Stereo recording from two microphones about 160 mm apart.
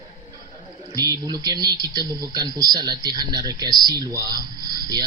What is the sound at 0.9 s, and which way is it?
Speech, 25° right (ahead or behind).